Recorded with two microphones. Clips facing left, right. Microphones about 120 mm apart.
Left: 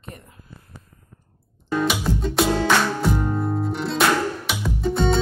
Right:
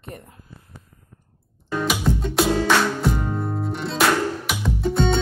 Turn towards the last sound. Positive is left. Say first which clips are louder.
# even
turn(degrees=0)  # may be behind; listen again after turning